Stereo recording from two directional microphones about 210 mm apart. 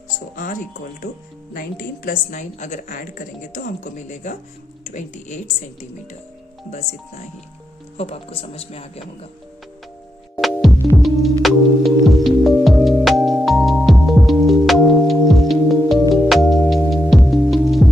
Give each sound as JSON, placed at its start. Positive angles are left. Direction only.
{"t": 0.3, "sound": "speech", "side_deg": 40}
{"t": 1.8, "sound": "a woman's voice", "side_deg": 40}
{"t": 7.9, "sound": "speech", "side_deg": 30}
{"t": 10.4, "sound": "music", "side_deg": 0}